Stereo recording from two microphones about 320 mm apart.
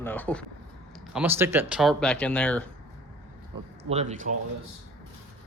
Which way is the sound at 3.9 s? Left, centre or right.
Right.